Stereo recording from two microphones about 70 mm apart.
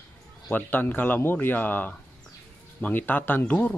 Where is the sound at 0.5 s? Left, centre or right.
Left.